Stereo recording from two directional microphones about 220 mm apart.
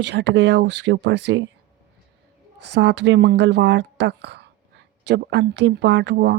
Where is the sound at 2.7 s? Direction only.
55° right (ahead or behind).